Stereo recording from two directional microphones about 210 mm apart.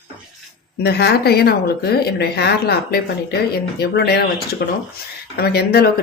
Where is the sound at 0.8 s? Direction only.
50° left (ahead or behind).